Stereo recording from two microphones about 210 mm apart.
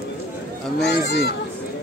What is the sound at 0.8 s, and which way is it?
Speech, 50° left (ahead or behind).